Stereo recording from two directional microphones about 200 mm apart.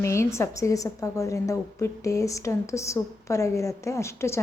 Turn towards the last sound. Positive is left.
turn(degrees=15)  # may be behind; listen again after turning